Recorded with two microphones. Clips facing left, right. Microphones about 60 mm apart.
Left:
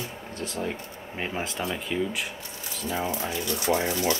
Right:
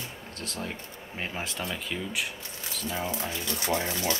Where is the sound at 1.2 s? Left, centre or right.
Centre.